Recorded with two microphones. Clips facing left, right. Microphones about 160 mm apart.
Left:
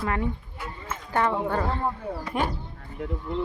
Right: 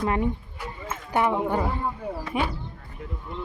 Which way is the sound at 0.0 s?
20° right (ahead or behind).